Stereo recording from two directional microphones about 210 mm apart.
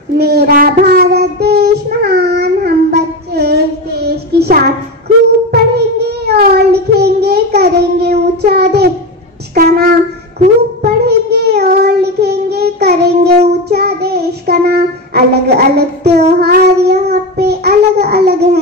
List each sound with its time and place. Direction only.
0.2 s child singing: 50° right (ahead or behind)
9.6 s a sound: 45° right (ahead or behind)
10.8 s child singing: 50° right (ahead or behind)